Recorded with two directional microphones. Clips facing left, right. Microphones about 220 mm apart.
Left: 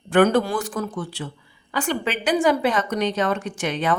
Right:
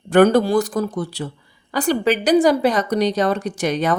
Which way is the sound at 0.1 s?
40° right (ahead or behind).